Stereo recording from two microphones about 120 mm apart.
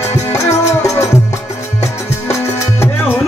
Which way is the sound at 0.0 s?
25° left (ahead or behind).